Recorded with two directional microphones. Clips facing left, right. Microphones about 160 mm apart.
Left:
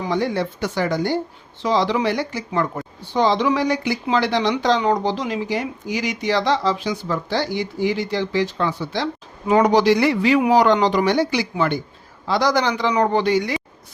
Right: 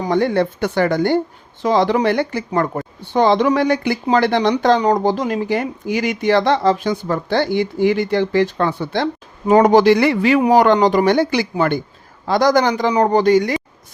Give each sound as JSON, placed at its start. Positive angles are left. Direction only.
{"t": 0.0, "sound": "speech", "side_deg": -55}